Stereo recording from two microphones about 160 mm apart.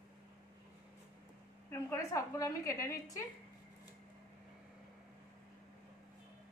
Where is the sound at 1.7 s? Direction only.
15° left (ahead or behind).